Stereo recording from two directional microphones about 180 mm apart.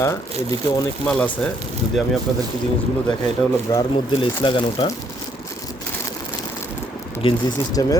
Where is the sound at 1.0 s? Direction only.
5° left (ahead or behind).